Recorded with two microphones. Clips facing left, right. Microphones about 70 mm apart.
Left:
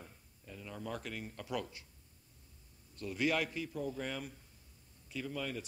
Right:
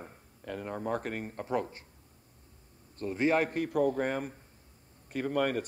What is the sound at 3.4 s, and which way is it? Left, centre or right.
A man's voice, right.